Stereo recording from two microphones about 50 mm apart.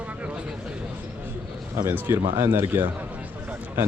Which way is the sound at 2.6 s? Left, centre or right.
Right.